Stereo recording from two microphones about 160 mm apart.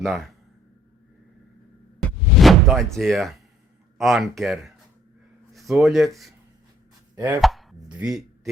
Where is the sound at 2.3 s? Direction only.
Centre (ahead or behind).